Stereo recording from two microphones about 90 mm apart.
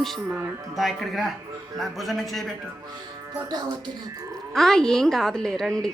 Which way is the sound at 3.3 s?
45° right (ahead or behind).